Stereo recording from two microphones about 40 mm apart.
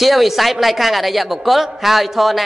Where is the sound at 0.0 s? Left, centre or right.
Centre.